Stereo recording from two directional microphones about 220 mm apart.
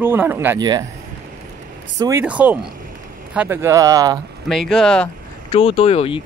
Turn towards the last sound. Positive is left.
turn(degrees=25)  # may be behind; listen again after turning